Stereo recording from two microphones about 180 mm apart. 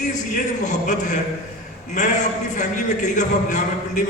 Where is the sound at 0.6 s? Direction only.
40° left (ahead or behind).